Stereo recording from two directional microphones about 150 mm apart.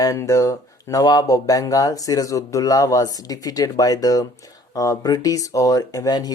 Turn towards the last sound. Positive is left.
turn(degrees=25)  # may be behind; listen again after turning